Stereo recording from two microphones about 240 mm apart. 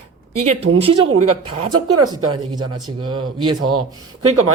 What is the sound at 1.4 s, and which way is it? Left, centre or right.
Speech, right.